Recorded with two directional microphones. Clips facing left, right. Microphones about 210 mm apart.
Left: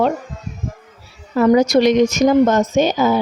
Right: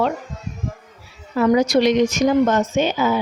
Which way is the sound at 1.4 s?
40° left (ahead or behind).